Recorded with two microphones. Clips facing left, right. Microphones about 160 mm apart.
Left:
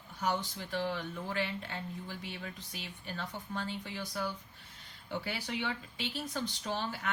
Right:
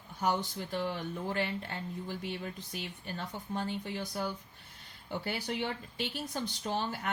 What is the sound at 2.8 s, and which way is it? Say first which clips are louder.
Speech: even; 45° right (ahead or behind).